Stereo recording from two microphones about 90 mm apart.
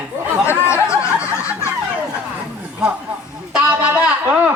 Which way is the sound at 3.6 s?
15° right (ahead or behind).